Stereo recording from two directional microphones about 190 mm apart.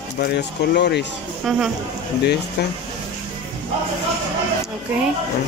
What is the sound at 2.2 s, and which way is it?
Speech, 60° left (ahead or behind).